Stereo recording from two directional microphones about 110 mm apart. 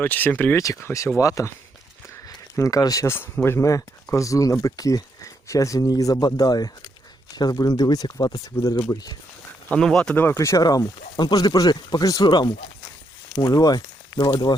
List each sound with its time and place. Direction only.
0.0 s speech: 15° left (ahead or behind)
0.5 s speech: 30° left (ahead or behind)
8.5 s speech: 25° left (ahead or behind)
9.6 s speech: 5° left (ahead or behind)
10.2 s speech: 25° left (ahead or behind)